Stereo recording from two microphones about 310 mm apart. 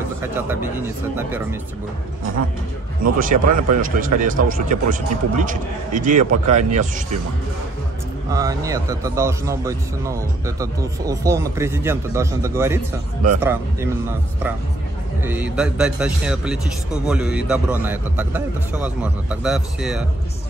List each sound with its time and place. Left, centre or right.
0.2 s a man's voice: centre
3.2 s speech: right
8.3 s a man's voice: centre